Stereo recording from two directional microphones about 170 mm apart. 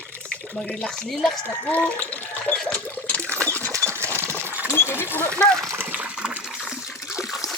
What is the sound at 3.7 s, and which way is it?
Sewing machine, 15° right (ahead or behind).